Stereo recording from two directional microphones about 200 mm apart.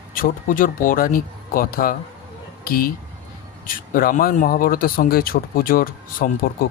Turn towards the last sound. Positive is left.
turn(degrees=45)  # may be behind; listen again after turning